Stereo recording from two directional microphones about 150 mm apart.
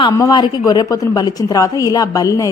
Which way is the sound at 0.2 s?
25° left (ahead or behind).